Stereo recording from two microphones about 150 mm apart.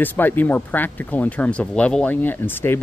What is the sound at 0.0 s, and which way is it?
Speech, 10° left (ahead or behind).